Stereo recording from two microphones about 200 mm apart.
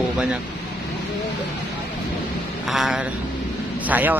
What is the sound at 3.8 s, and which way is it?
Speech, 10° right (ahead or behind).